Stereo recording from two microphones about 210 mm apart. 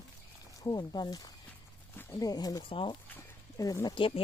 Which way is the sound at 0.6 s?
20° left (ahead or behind).